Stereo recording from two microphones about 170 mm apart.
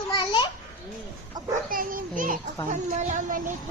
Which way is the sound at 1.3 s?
25° right (ahead or behind).